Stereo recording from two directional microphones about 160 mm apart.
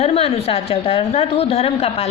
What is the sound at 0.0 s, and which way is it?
A woman's voice, 40° left (ahead or behind).